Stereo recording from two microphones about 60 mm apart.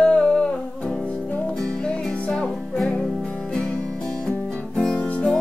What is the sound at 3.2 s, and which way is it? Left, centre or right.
Music, centre.